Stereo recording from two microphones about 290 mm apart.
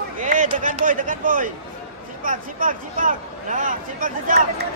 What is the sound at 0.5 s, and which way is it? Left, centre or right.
Speech, right.